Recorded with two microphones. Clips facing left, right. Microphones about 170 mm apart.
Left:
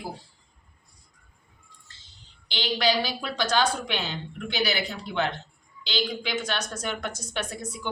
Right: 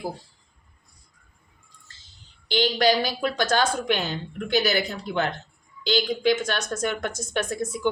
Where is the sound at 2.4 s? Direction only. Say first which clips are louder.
Right 5 dB; 45° right (ahead or behind).